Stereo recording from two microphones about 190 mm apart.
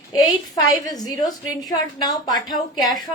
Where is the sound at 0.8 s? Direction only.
20° left (ahead or behind).